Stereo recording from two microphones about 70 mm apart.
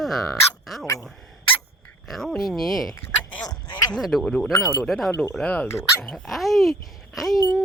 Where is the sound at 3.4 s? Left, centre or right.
Left.